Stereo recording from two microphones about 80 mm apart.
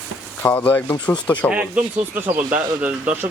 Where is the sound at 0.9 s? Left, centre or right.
Left.